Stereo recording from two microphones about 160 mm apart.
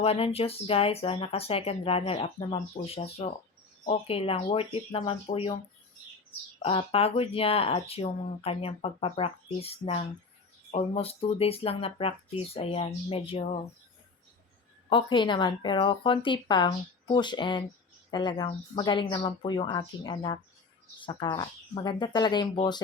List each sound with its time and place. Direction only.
0.0 s speech: 40° left (ahead or behind)
6.6 s speech: 35° left (ahead or behind)
14.8 s speech: 30° left (ahead or behind)